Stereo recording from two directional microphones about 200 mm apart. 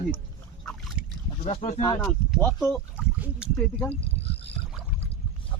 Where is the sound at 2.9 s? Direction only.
5° right (ahead or behind).